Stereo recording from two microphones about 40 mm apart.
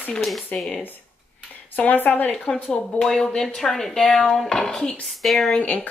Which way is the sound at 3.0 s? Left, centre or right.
Centre.